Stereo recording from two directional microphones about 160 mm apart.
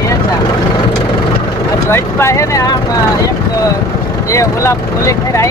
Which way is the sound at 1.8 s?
15° left (ahead or behind).